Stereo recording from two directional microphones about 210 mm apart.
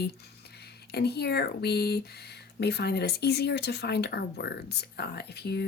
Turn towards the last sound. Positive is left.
turn(degrees=50)  # may be behind; listen again after turning